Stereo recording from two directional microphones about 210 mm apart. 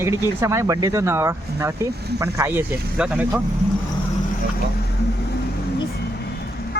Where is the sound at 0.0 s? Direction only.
15° right (ahead or behind).